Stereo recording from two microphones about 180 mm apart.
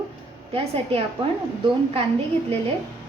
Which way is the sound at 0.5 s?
35° right (ahead or behind).